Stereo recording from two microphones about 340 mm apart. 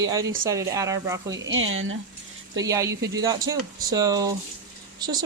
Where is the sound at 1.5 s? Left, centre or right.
Right.